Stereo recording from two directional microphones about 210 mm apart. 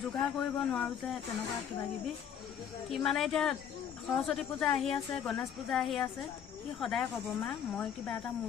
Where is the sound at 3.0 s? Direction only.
Centre (ahead or behind).